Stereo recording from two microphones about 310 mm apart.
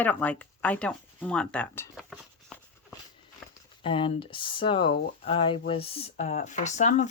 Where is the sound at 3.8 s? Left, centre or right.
Centre.